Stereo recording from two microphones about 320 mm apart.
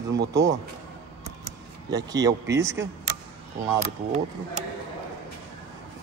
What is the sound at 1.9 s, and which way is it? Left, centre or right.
Speech, centre.